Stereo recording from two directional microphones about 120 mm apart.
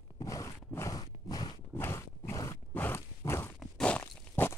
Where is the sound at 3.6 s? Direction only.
10° left (ahead or behind).